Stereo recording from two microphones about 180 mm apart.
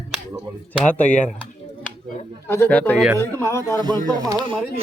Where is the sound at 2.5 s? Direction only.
10° left (ahead or behind).